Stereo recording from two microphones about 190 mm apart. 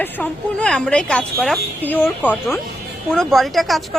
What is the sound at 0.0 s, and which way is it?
A woman's voice, 5° left (ahead or behind).